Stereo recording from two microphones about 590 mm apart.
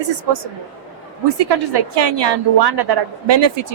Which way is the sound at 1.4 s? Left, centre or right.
Right.